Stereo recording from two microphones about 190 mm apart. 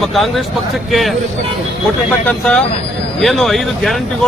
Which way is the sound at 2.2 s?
5° left (ahead or behind).